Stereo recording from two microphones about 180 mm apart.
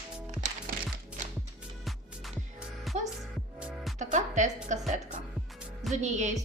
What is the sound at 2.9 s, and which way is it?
Music, centre (ahead or behind).